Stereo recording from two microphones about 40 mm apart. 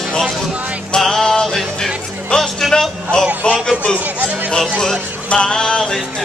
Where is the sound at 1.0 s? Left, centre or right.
Centre.